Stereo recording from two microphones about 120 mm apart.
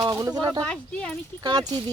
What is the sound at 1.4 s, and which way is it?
Speech, 35° right (ahead or behind).